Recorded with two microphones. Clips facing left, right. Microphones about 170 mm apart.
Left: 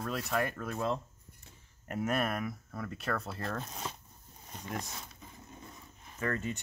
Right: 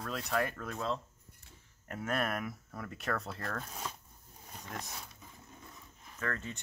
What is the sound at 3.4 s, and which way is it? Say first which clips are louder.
Speech: left 2 dB; 25° left (ahead or behind).